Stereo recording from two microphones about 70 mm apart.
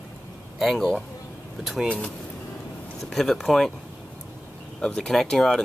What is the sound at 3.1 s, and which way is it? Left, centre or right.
Speech, centre.